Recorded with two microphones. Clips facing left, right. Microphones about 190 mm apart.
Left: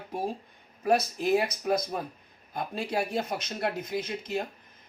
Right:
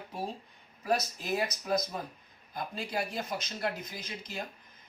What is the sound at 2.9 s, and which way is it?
Speech, 60° left (ahead or behind).